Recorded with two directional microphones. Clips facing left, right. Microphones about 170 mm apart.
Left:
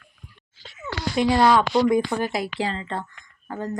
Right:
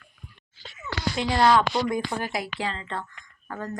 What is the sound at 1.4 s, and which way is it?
Speech, 15° left (ahead or behind).